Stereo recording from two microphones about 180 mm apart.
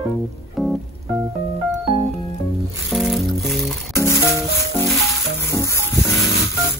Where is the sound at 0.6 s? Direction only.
Centre (ahead or behind).